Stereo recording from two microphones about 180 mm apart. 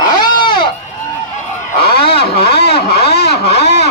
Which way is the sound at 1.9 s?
60° left (ahead or behind).